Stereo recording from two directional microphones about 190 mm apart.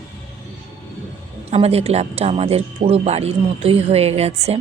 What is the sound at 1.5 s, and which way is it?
Speech, 30° right (ahead or behind).